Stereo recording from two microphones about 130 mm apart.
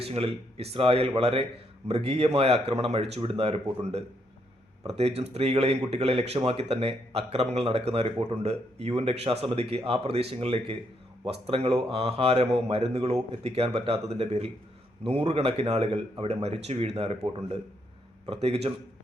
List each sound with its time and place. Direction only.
0.0 s speech: 50° right (ahead or behind)